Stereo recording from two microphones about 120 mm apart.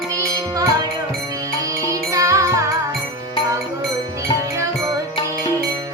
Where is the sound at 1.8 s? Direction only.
25° right (ahead or behind).